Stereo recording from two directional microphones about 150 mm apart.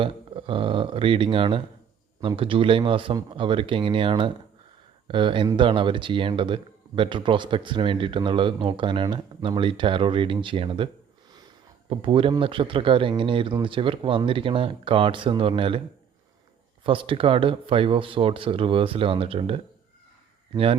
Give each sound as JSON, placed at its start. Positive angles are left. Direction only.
{"t": 0.0, "sound": "speech", "side_deg": -35}
{"t": 11.9, "sound": "speech", "side_deg": -35}
{"t": 16.8, "sound": "speech", "side_deg": -35}